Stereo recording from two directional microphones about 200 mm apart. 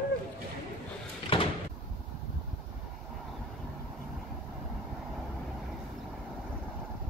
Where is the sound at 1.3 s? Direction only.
25° left (ahead or behind).